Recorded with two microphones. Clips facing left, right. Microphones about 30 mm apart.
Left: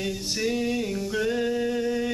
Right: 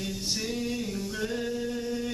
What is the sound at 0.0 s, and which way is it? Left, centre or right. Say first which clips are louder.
Music: left 5 dB; centre.